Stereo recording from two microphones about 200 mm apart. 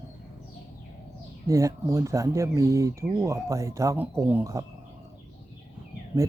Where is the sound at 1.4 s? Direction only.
15° right (ahead or behind).